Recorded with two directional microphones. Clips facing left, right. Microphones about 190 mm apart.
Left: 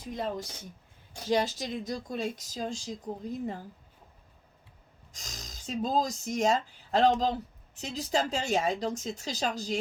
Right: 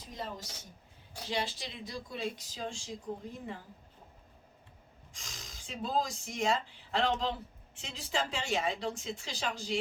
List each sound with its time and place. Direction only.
0.0 s speech: 55° left (ahead or behind)
1.3 s speech: 40° left (ahead or behind)
5.1 s speech: 40° left (ahead or behind)